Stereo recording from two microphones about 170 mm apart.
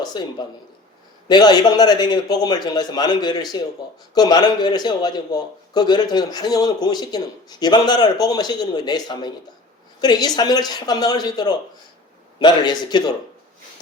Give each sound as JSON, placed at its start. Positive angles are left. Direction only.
{"t": 0.0, "sound": "a man's voice", "side_deg": 25}